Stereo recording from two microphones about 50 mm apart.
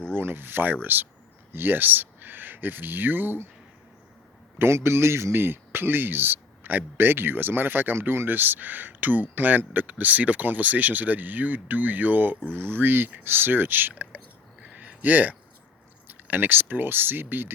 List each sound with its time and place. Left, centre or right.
0.1 s speech: right
4.5 s speech: right
14.6 s a sound: right
16.0 s speech: right